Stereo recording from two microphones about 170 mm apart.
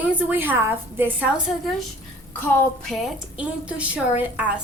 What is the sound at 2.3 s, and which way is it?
Speech, 10° left (ahead or behind).